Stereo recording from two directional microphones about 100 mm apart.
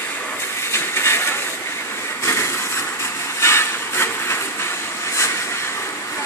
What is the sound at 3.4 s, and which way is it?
Train, 25° left (ahead or behind).